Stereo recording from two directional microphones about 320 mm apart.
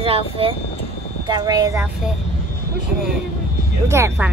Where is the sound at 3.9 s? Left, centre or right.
Centre.